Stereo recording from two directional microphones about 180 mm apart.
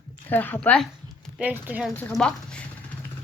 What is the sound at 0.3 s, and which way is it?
Speech, 10° left (ahead or behind).